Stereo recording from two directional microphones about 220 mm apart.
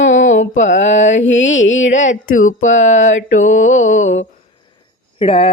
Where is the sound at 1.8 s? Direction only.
35° left (ahead or behind).